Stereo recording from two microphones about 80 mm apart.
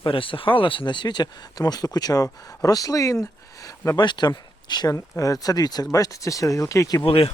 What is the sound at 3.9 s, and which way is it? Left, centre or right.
Speech, left.